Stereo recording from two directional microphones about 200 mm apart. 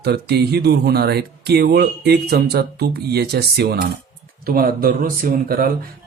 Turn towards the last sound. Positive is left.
turn(degrees=-45)  # may be behind; listen again after turning